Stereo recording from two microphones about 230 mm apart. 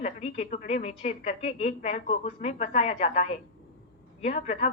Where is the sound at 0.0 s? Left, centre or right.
Left.